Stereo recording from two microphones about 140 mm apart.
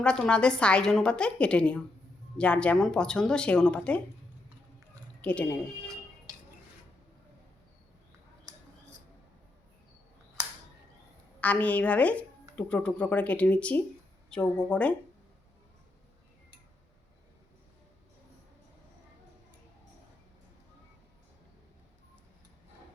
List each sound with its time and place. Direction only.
0.0 s speech: 5° left (ahead or behind)
5.2 s speech: 10° left (ahead or behind)
11.3 s speech: 10° left (ahead or behind)